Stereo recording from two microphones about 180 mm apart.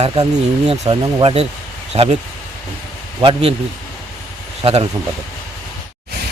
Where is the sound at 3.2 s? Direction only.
30° right (ahead or behind).